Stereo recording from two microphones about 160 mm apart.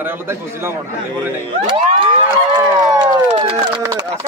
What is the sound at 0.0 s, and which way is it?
Speech, 15° right (ahead or behind).